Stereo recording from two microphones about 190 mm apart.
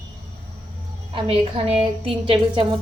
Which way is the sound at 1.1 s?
30° right (ahead or behind).